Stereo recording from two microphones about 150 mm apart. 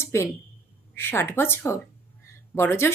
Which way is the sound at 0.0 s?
20° left (ahead or behind).